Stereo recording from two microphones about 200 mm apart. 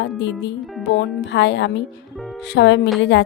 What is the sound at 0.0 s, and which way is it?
Speech, 60° left (ahead or behind).